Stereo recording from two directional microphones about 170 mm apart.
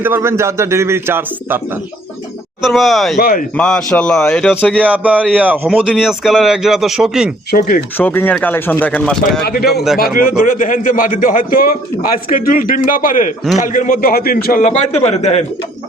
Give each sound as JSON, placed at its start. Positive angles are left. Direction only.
{"t": 0.0, "sound": "a man's voice", "side_deg": -15}
{"t": 2.6, "sound": "speech", "side_deg": 0}
{"t": 3.2, "sound": "speech", "side_deg": 60}
{"t": 3.5, "sound": "speech", "side_deg": 5}
{"t": 4.8, "sound": "a man's voice", "side_deg": -10}
{"t": 7.9, "sound": "speech", "side_deg": 10}
{"t": 9.4, "sound": "speech", "side_deg": 65}
{"t": 10.2, "sound": "a man's voice", "side_deg": 55}